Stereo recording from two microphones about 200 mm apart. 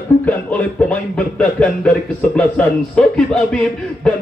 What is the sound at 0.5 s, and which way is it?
Speech, 5° left (ahead or behind).